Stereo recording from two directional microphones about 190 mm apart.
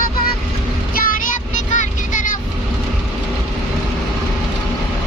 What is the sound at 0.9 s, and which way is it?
Child singing, 45° left (ahead or behind).